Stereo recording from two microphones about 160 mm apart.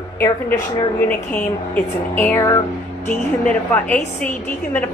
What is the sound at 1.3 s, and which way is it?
A woman's voice, 10° left (ahead or behind).